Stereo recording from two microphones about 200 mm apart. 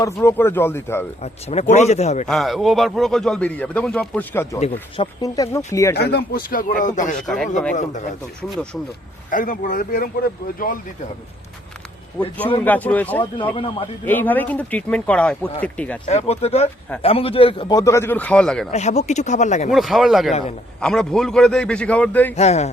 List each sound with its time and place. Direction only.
0.0 s speech: 10° left (ahead or behind)
1.2 s speech: 30° left (ahead or behind)
2.2 s a man's voice: centre (ahead or behind)
6.0 s speech: 55° left (ahead or behind); by 8.0 s 40° left (ahead or behind)
8.4 s a man's voice: 5° left (ahead or behind)
9.3 s speech: 40° left (ahead or behind)
12.2 s speech: 5° left (ahead or behind)
16.0 s speech: 30° left (ahead or behind); by 18.7 s 5° left (ahead or behind)
18.7 s speech: 35° left (ahead or behind)
19.7 s a man's voice: centre (ahead or behind)
22.4 s speech: 35° left (ahead or behind)